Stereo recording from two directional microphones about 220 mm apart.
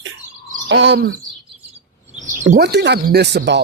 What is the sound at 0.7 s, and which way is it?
Speech, 50° right (ahead or behind).